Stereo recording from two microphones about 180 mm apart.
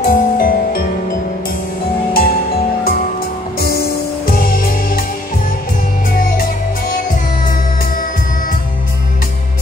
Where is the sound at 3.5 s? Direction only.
60° left (ahead or behind).